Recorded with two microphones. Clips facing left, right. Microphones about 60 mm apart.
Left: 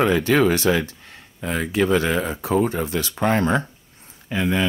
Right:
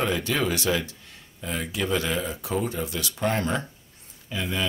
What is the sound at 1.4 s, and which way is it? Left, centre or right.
Speech, left.